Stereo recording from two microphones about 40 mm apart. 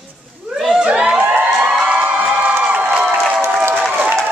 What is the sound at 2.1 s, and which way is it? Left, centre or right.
Crowd, right.